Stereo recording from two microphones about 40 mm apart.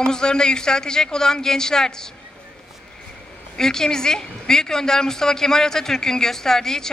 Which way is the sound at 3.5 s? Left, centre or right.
Centre.